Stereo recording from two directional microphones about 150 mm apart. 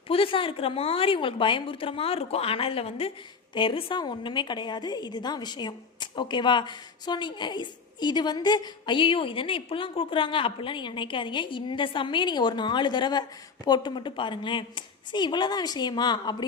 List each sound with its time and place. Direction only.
0.1 s a woman's voice: 35° left (ahead or behind)